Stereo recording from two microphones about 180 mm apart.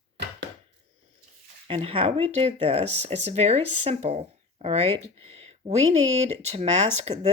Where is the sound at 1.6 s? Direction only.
30° right (ahead or behind).